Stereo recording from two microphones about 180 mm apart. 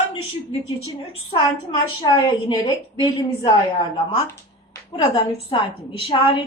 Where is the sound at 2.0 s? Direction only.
25° left (ahead or behind).